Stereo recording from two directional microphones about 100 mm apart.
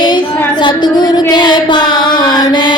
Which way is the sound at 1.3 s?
45° left (ahead or behind).